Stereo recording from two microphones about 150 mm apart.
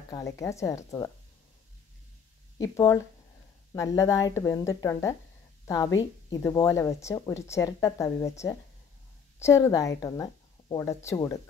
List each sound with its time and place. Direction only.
0.1 s speech: 20° left (ahead or behind)
2.6 s speech: 20° left (ahead or behind)